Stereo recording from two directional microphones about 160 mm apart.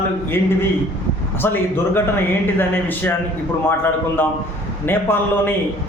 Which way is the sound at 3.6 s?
15° left (ahead or behind).